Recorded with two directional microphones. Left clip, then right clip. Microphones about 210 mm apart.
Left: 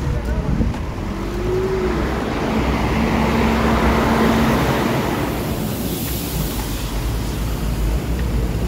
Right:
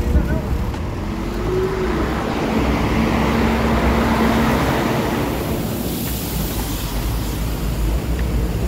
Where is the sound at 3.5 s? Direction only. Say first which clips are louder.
Left 1 dB; 35° left (ahead or behind).